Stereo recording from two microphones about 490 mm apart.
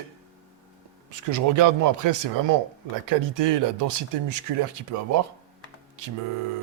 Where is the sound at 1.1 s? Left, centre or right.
Right.